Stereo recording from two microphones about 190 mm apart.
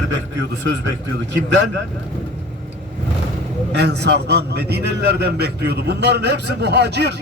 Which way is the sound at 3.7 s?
60° right (ahead or behind).